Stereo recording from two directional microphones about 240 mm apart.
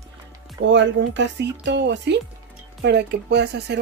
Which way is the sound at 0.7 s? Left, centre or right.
Right.